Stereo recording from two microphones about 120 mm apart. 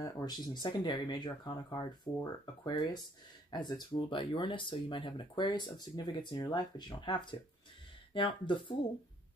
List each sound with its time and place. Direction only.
0.0 s speech: 30° left (ahead or behind)